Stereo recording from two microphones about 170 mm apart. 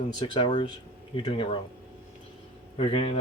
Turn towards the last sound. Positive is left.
turn(degrees=35)  # may be behind; listen again after turning